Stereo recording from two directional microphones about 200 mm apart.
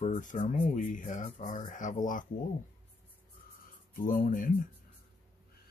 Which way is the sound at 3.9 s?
45° left (ahead or behind).